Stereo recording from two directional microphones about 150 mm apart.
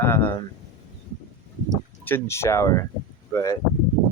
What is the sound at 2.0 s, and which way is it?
Speech, 15° left (ahead or behind).